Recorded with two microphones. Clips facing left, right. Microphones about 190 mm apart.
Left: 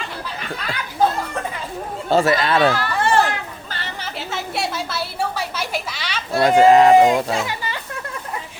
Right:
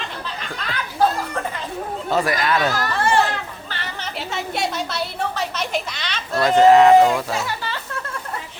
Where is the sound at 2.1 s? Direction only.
25° left (ahead or behind).